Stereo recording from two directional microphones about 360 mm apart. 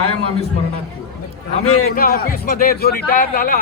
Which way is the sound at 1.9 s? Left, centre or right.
Left.